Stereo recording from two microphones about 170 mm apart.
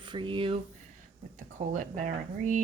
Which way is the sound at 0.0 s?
30° right (ahead or behind).